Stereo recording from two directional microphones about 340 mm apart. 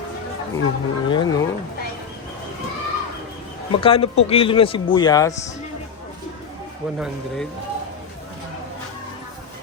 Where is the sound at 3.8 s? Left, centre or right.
Centre.